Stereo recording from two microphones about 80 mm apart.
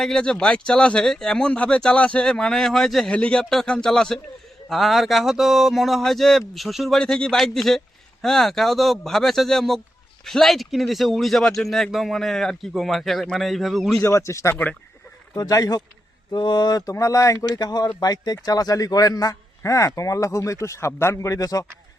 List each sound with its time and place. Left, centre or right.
0.0 s a man's voice: centre
14.0 s speech: left
14.5 s speech: centre
15.4 s a man's voice: left
16.3 s a man's voice: left